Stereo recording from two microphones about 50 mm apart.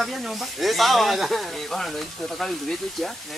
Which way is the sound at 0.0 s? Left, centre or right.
Centre.